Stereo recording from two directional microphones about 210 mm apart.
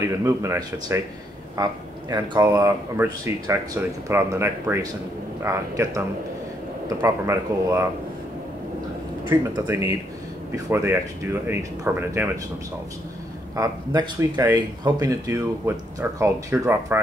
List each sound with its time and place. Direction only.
0.0 s speech: 15° right (ahead or behind)
9.3 s speech: 15° right (ahead or behind)
13.6 s speech: 15° right (ahead or behind)